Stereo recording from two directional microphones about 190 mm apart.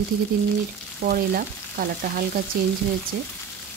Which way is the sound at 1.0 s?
50° right (ahead or behind).